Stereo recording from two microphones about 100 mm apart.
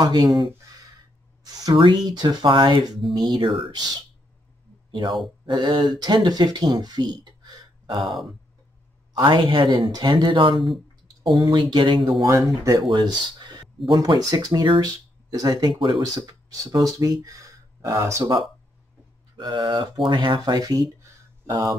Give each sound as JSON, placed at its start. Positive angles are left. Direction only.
{"t": 0.0, "sound": "speech", "side_deg": -45}
{"t": 1.4, "sound": "a sound", "side_deg": -40}
{"t": 2.0, "sound": "speech", "side_deg": -45}
{"t": 5.0, "sound": "speech", "side_deg": -55}
{"t": 8.0, "sound": "speech", "side_deg": 0}
{"t": 9.2, "sound": "speech", "side_deg": -50}
{"t": 10.5, "sound": "speech", "side_deg": 0}
{"t": 11.3, "sound": "speech", "side_deg": -45}
{"t": 12.3, "sound": "speech", "side_deg": -30}
{"t": 12.9, "sound": "speech", "side_deg": -45}
{"t": 19.3, "sound": "speech", "side_deg": -50}